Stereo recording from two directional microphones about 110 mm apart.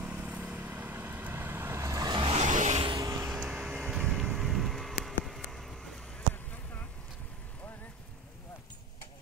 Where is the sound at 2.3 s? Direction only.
90° right.